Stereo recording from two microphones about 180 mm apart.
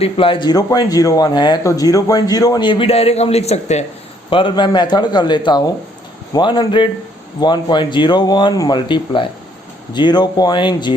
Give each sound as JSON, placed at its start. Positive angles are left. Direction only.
{"t": 0.0, "sound": "speech", "side_deg": 30}